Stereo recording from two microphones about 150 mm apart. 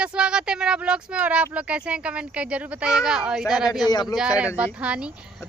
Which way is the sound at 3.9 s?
25° left (ahead or behind).